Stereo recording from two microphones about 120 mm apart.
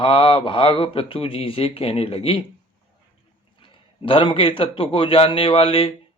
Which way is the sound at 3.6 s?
45° left (ahead or behind).